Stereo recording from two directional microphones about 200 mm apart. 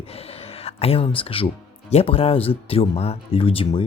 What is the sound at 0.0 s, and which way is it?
Speech, 30° left (ahead or behind).